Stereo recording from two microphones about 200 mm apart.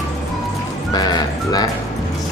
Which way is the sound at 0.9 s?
20° left (ahead or behind).